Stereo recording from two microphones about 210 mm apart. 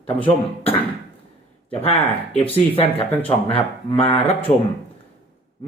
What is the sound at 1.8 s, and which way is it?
Speech, 30° left (ahead or behind).